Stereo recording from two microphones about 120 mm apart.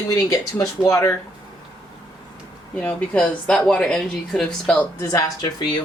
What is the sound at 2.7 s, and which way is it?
Speech, 10° left (ahead or behind).